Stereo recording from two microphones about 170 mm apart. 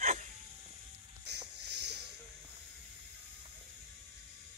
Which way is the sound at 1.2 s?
80° right.